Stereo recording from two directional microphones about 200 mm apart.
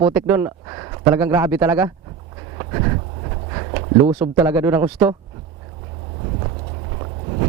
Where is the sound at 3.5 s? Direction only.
20° right (ahead or behind).